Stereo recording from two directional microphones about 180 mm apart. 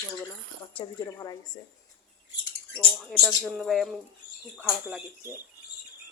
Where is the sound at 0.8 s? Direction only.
20° left (ahead or behind).